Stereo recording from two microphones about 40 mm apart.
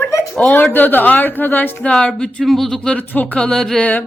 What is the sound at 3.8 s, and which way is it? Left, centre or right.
Speech, left.